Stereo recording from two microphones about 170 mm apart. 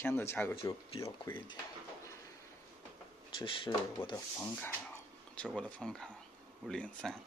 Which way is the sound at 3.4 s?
30° left (ahead or behind).